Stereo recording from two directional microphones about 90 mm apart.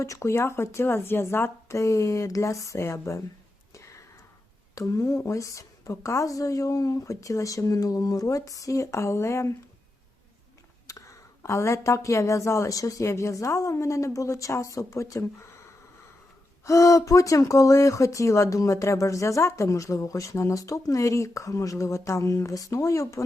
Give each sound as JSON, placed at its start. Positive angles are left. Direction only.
{"t": 0.0, "sound": "speech", "side_deg": 35}
{"t": 3.8, "sound": "a sound", "side_deg": 35}
{"t": 4.7, "sound": "speech", "side_deg": 35}
{"t": 10.9, "sound": "a sound", "side_deg": 35}
{"t": 11.4, "sound": "speech", "side_deg": 30}
{"t": 16.6, "sound": "speech", "side_deg": 35}